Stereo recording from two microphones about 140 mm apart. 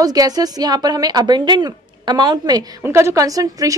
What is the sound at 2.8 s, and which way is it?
A woman's voice, 20° right (ahead or behind).